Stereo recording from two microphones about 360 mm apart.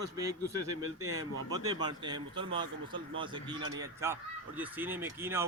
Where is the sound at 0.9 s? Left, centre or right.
Right.